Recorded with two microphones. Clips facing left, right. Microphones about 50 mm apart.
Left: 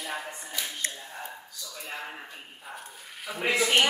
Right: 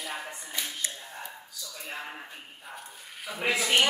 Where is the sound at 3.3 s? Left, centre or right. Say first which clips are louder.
Left 2 dB; centre.